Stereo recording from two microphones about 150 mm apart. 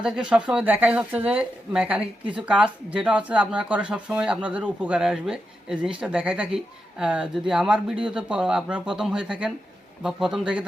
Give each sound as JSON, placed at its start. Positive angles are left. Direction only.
{"t": 0.0, "sound": "speech", "side_deg": -5}